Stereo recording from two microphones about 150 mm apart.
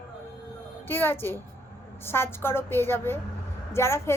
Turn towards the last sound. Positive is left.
turn(degrees=15)  # may be behind; listen again after turning